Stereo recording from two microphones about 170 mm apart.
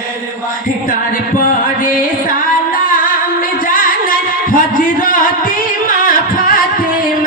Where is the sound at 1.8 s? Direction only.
55° left (ahead or behind).